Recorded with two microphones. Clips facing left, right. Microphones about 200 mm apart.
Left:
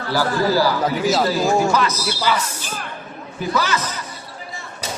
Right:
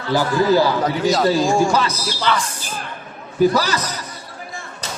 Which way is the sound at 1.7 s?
30° right (ahead or behind).